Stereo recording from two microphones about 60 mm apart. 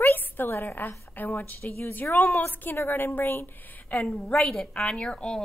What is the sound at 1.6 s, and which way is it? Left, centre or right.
Speech, left.